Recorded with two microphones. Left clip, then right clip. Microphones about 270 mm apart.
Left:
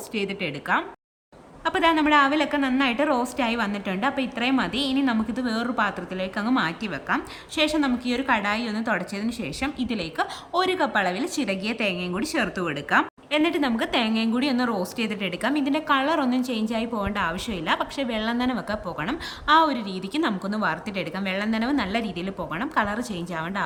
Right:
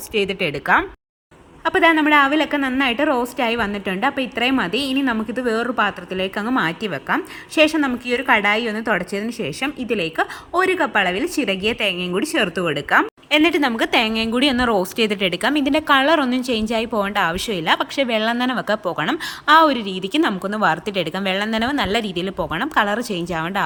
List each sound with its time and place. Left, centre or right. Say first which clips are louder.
0.1 s a woman's voice: right 8 dB; centre